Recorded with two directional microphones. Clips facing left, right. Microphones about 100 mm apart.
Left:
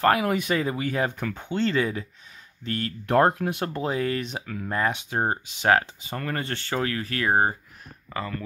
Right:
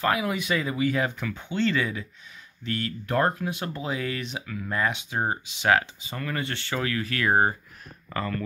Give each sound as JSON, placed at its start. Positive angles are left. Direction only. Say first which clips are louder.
{"t": 0.0, "sound": "speech", "louder": "left 4 dB", "side_deg": 50}
{"t": 3.1, "sound": "speech", "louder": "left 5 dB", "side_deg": 70}